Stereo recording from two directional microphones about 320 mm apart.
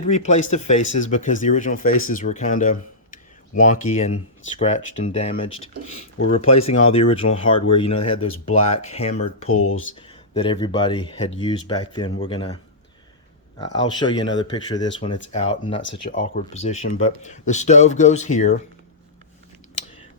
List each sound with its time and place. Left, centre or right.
0.0 s speech: left
9.2 s speech: left
10.1 s speech: centre
13.6 s speech: centre
15.8 s speech: left
16.1 s speech: left